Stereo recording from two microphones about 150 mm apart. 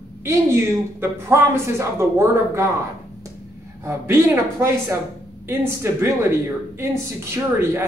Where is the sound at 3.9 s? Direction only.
20° right (ahead or behind).